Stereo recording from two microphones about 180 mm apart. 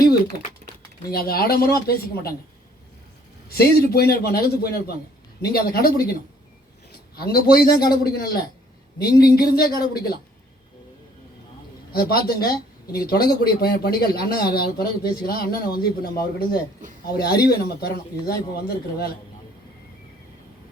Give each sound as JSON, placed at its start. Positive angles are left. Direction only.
{"t": 1.1, "sound": "speech", "side_deg": 55}
{"t": 3.5, "sound": "speech", "side_deg": 60}
{"t": 7.2, "sound": "speech", "side_deg": 60}
{"t": 11.9, "sound": "speech", "side_deg": 60}